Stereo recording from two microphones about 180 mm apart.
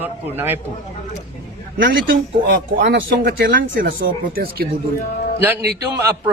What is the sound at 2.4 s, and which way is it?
Speech, 65° right (ahead or behind).